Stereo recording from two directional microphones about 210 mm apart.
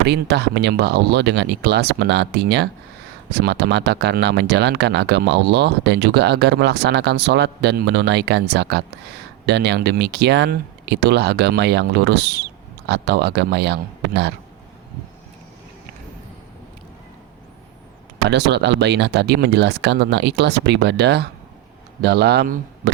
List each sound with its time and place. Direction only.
0.0 s speech: 55° right (ahead or behind)
18.3 s speech: 55° right (ahead or behind)